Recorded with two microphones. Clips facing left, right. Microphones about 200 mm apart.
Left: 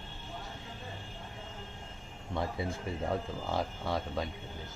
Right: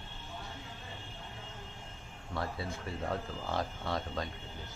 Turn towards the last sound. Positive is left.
turn(degrees=10)  # may be behind; listen again after turning